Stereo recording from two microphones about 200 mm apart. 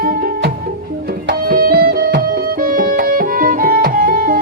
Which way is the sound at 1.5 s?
50° right (ahead or behind).